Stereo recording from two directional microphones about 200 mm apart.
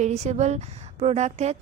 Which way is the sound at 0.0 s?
35° right (ahead or behind).